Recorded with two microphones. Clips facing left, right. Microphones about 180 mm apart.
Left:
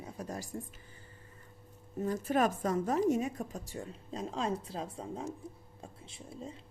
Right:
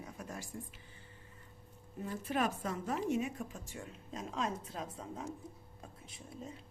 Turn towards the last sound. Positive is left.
turn(degrees=25)  # may be behind; listen again after turning